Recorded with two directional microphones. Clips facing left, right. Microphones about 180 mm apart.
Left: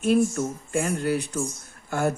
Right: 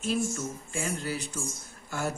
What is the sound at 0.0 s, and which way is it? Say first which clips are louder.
Speech: left 8 dB; 60° left (ahead or behind).